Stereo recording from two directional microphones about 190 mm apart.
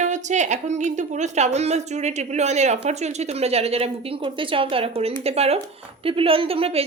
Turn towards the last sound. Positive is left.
turn(degrees=-30)  # may be behind; listen again after turning